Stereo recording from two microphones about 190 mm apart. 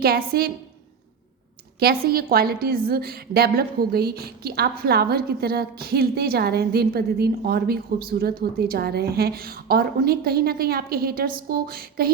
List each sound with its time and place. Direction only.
0.0 s a woman's voice: 55° right (ahead or behind)
1.8 s a woman's voice: 55° right (ahead or behind)